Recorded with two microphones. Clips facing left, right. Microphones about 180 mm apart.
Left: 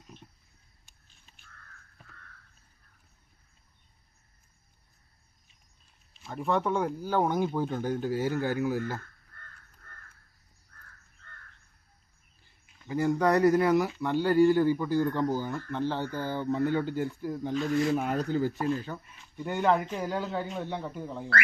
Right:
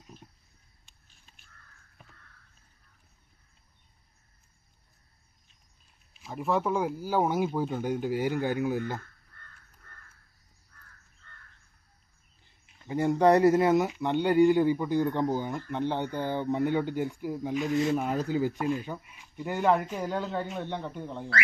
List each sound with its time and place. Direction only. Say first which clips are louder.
6.1 s speech: even; 5° right (ahead or behind); by 9.0 s 20° right (ahead or behind)
12.8 s speech: right 3 dB; 25° right (ahead or behind)
17.9 s speech: even; centre (ahead or behind)